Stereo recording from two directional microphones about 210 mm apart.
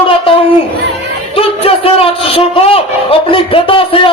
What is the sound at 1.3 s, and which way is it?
A man's voice, 25° left (ahead or behind).